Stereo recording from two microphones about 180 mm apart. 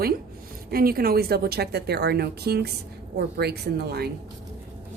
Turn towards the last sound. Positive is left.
turn(degrees=-60)  # may be behind; listen again after turning